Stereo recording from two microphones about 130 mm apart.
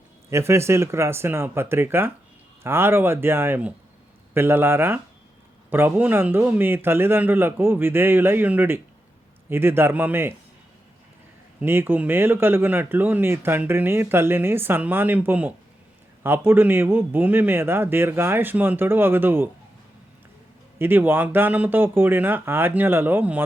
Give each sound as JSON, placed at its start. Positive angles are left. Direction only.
{"t": 0.3, "sound": "speech", "side_deg": -20}
{"t": 11.6, "sound": "speech", "side_deg": -15}
{"t": 20.7, "sound": "speech", "side_deg": -15}